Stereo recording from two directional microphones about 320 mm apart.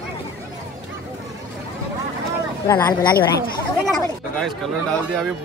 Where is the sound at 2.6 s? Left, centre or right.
Centre.